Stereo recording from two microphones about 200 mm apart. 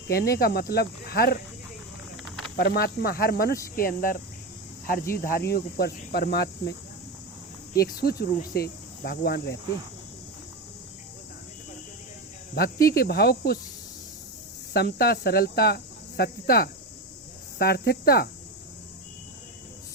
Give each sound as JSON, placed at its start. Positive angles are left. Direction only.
{"t": 0.1, "sound": "speech", "side_deg": 50}
{"t": 2.6, "sound": "speech", "side_deg": 50}
{"t": 12.5, "sound": "speech", "side_deg": 50}
{"t": 14.7, "sound": "speech", "side_deg": 50}